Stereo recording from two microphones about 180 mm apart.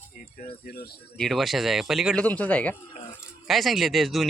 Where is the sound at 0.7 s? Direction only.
55° left (ahead or behind).